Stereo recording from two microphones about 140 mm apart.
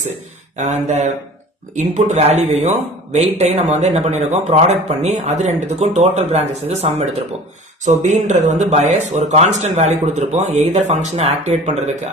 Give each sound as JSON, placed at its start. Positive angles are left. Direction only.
{"t": 0.5, "sound": "speech", "side_deg": -55}